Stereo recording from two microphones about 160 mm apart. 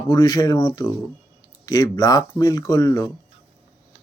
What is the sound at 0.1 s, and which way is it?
Speech, 25° left (ahead or behind).